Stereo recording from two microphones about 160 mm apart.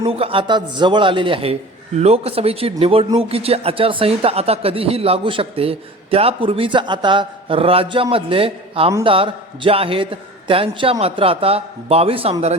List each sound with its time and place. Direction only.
0.0 s speech: 35° right (ahead or behind)